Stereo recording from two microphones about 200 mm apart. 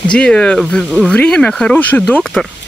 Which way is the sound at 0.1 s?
5° left (ahead or behind).